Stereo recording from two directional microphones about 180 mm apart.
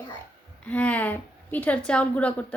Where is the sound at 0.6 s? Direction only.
10° left (ahead or behind).